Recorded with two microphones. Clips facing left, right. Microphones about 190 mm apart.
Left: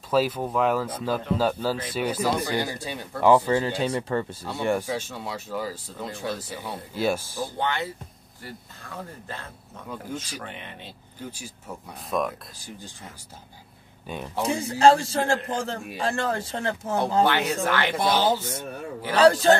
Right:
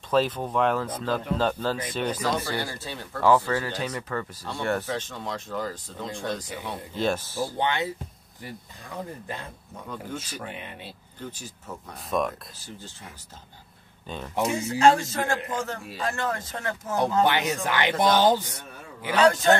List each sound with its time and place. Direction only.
0.1 s speech: 10° left (ahead or behind); by 4.5 s 25° left (ahead or behind)
4.6 s speech: 15° left (ahead or behind)
7.5 s speech: 15° right (ahead or behind)
11.1 s speech: 10° left (ahead or behind)
12.5 s speech: 15° left (ahead or behind)
14.0 s speech: 10° left (ahead or behind)
14.4 s a man's voice: 35° left (ahead or behind)
17.2 s speech: 15° right (ahead or behind)
17.9 s speech: 10° left (ahead or behind)
19.1 s a man's voice: 35° left (ahead or behind)